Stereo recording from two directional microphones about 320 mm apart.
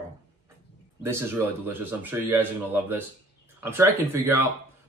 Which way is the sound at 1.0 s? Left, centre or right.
Centre.